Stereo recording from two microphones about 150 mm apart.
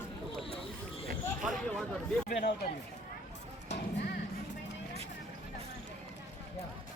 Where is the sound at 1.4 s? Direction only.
Centre (ahead or behind).